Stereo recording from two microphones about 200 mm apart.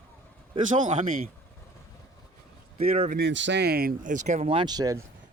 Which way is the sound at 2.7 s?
30° right (ahead or behind).